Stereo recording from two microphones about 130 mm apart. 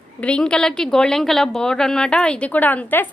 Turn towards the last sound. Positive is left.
turn(degrees=15)  # may be behind; listen again after turning